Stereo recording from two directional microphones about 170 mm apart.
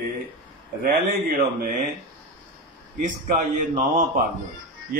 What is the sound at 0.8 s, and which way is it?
Speech, 55° right (ahead or behind).